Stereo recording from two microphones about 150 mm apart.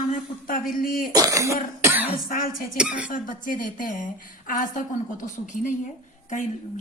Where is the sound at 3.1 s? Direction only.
65° left (ahead or behind).